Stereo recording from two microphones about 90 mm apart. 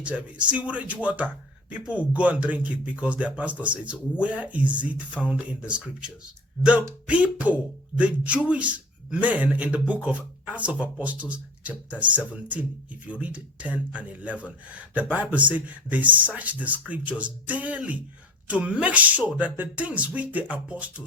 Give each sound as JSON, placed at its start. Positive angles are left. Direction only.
{"t": 0.0, "sound": "speech", "side_deg": -15}